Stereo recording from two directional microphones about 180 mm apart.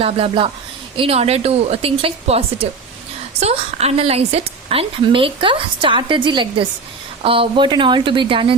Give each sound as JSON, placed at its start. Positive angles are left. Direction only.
{"t": 0.0, "sound": "a woman's voice", "side_deg": -30}